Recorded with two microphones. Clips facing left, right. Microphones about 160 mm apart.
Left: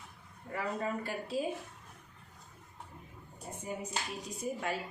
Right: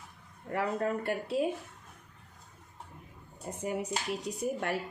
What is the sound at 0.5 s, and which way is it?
Speech, 65° right (ahead or behind).